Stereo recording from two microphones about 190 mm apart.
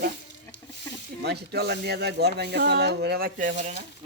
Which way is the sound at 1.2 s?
60° right (ahead or behind).